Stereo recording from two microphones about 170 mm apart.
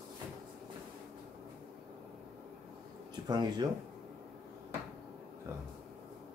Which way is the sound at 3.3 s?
25° right (ahead or behind).